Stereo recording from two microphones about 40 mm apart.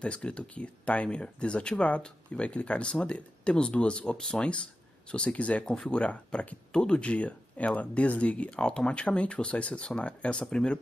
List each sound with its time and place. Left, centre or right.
0.0 s speech: left
5.7 s speech: left
6.7 s speech: centre
7.0 s speech: left
8.5 s speech: left